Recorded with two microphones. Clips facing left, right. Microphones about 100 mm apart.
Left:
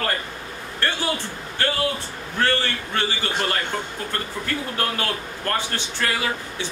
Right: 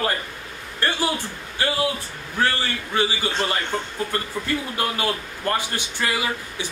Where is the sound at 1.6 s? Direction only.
10° right (ahead or behind).